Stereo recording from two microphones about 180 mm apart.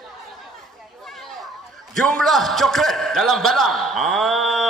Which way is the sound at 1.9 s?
Centre (ahead or behind).